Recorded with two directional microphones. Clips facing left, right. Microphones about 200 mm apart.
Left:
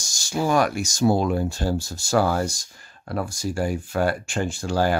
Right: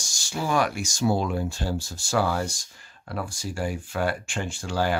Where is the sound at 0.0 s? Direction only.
40° left (ahead or behind).